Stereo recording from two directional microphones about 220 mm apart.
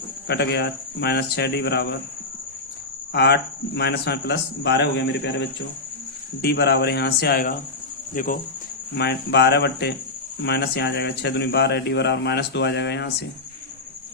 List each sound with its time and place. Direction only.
0.3 s speech: 50° left (ahead or behind)
3.1 s speech: 50° left (ahead or behind)
9.0 s speech: 50° left (ahead or behind)